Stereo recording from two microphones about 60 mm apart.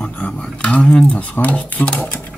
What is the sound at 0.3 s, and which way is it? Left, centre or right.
Speech, centre.